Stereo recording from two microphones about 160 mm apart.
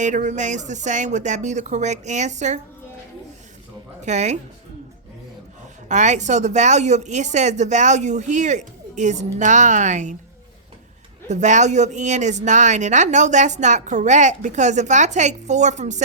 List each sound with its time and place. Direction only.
0.0 s speech: 50° right (ahead or behind)
4.0 s speech: 45° right (ahead or behind)
5.9 s speech: 50° right (ahead or behind)
11.3 s speech: 50° right (ahead or behind)